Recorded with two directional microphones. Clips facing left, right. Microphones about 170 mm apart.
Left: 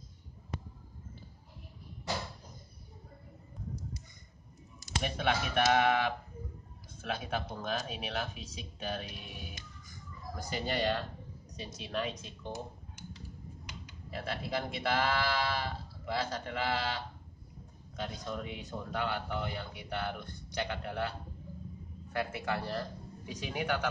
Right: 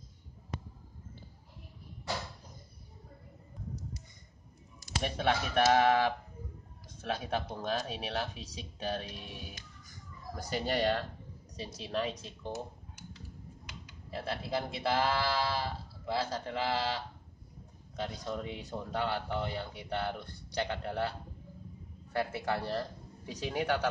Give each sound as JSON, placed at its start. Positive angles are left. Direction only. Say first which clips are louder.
{"t": 5.0, "sound": "speech", "louder": "right 1 dB", "side_deg": -35}
{"t": 10.5, "sound": "speech", "louder": "right 2 dB", "side_deg": -35}
{"t": 12.4, "sound": "a sound", "louder": "right 2 dB", "side_deg": -5}
{"t": 14.1, "sound": "speech", "louder": "right 1 dB", "side_deg": -30}
{"t": 22.1, "sound": "speech", "louder": "right 2 dB", "side_deg": -35}